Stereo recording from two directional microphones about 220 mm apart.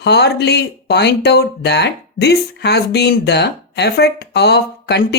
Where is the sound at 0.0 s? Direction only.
50° left (ahead or behind).